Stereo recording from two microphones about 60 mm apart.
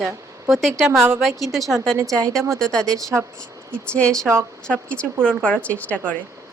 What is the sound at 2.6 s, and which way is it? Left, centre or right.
A woman's voice, centre.